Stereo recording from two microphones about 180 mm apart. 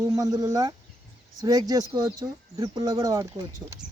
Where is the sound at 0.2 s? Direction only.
20° right (ahead or behind).